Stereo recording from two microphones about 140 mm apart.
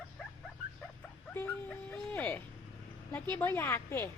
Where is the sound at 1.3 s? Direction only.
10° left (ahead or behind).